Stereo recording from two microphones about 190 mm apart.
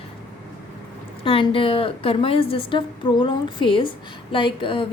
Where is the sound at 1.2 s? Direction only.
25° left (ahead or behind).